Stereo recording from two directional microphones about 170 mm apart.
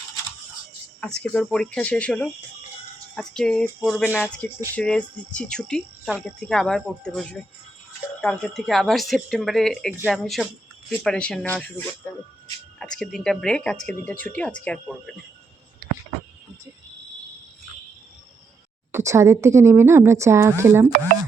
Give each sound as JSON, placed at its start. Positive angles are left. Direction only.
{"t": 1.0, "sound": "speech", "side_deg": 5}
{"t": 4.1, "sound": "music", "side_deg": 10}
{"t": 4.7, "sound": "speech", "side_deg": 5}
{"t": 12.8, "sound": "speech", "side_deg": 0}
{"t": 18.9, "sound": "a woman's voice", "side_deg": -15}